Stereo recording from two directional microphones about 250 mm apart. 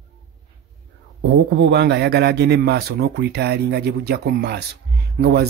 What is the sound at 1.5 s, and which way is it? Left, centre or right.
Speech, right.